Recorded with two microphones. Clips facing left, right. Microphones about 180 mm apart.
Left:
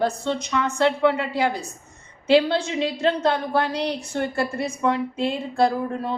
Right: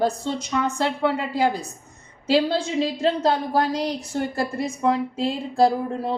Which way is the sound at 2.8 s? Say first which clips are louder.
Right 1 dB; 35° right (ahead or behind).